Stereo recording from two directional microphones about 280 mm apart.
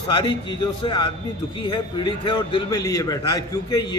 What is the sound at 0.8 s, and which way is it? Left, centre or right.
A man's voice, centre.